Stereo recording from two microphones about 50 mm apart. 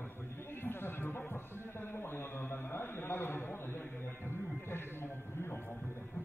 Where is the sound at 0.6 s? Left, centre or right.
Left.